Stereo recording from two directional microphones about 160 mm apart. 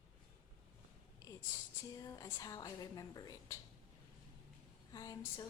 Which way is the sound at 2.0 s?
20° left (ahead or behind).